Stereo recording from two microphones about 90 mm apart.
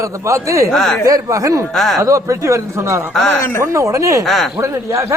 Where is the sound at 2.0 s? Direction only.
35° right (ahead or behind).